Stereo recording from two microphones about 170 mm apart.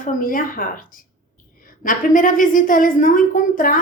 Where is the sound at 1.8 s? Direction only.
50° left (ahead or behind).